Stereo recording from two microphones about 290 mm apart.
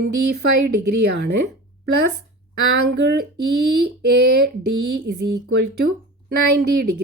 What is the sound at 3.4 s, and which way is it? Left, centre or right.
Speech, right.